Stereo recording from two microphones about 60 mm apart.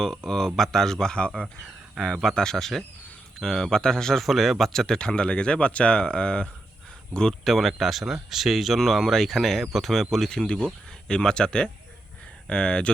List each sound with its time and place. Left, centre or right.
0.3 s speech: centre
1.6 s speech: centre
7.4 s speech: centre